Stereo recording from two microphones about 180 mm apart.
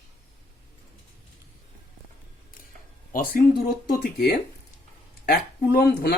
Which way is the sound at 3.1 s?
55° left (ahead or behind).